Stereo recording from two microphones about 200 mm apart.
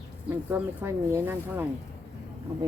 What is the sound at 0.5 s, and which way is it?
Speech, 10° right (ahead or behind).